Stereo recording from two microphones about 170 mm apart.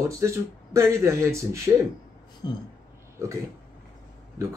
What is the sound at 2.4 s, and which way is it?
Speech, 25° left (ahead or behind).